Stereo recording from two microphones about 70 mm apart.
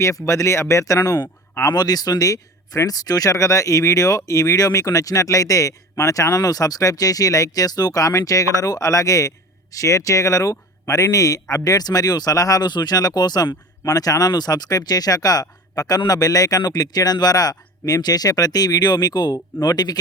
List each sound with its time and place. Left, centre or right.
0.3 s speech: left
1.7 s speech: left